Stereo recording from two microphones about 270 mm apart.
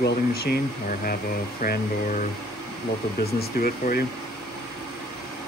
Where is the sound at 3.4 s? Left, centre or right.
Left.